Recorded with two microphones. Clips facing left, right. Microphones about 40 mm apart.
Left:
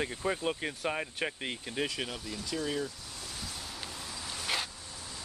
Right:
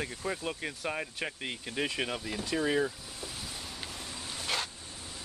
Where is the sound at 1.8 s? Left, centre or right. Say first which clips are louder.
Right 3 dB; right.